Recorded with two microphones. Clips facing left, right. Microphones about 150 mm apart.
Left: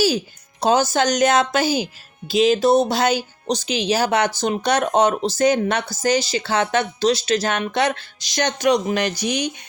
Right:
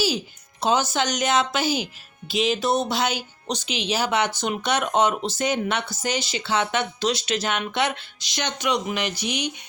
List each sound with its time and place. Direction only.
0.6 s a woman's voice: 40° left (ahead or behind)